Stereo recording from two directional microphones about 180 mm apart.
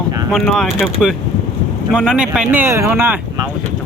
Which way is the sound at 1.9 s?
5° right (ahead or behind).